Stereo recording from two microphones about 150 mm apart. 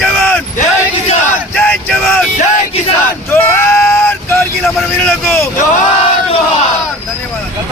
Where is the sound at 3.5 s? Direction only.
15° left (ahead or behind).